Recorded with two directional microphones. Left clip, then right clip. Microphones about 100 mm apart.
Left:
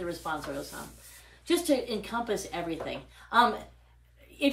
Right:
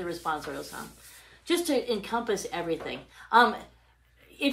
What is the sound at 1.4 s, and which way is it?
A woman's voice, 35° right (ahead or behind).